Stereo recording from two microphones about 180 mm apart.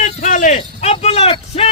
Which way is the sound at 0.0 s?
45° left (ahead or behind).